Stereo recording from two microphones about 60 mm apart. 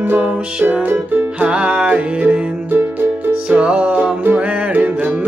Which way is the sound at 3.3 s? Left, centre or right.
Centre.